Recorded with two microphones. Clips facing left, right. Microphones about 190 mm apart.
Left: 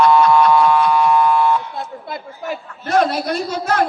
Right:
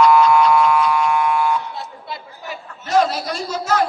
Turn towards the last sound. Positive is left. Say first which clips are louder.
# left 2 dB
turn(degrees=55)  # may be behind; listen again after turning